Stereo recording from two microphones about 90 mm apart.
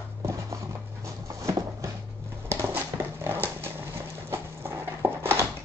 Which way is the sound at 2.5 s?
25° right (ahead or behind).